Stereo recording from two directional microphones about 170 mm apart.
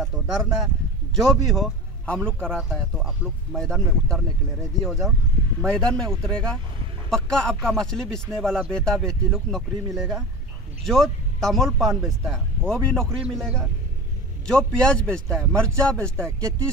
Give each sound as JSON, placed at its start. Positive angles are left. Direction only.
{"t": 0.0, "sound": "a man's voice", "side_deg": 0}
{"t": 10.9, "sound": "a man's voice", "side_deg": 0}
{"t": 16.2, "sound": "speech", "side_deg": -15}